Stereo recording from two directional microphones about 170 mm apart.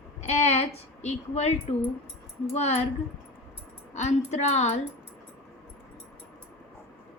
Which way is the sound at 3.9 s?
40° left (ahead or behind).